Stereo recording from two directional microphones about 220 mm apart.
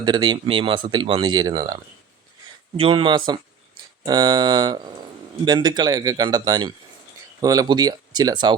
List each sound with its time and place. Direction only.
0.0 s speech: 20° right (ahead or behind)